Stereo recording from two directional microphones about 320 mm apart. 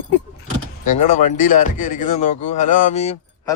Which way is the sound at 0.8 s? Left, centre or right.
Left.